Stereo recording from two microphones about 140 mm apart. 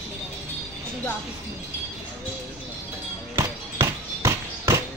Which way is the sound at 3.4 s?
20° right (ahead or behind).